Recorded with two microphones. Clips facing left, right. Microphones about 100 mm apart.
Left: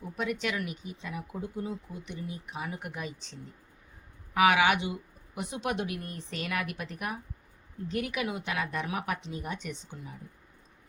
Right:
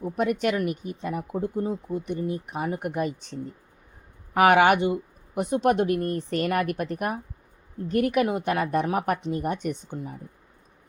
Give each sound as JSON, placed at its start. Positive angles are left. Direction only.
{"t": 0.0, "sound": "speech", "side_deg": -50}